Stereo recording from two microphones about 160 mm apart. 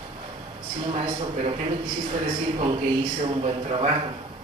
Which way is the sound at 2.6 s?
35° right (ahead or behind).